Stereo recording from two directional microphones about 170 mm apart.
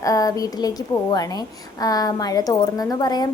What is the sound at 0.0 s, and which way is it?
Speech, 20° left (ahead or behind).